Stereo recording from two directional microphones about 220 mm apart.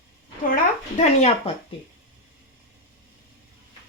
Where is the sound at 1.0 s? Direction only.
30° left (ahead or behind).